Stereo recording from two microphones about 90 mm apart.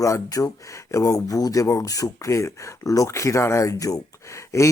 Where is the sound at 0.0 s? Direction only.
40° left (ahead or behind).